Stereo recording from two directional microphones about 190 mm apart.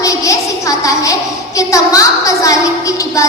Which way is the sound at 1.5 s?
15° left (ahead or behind).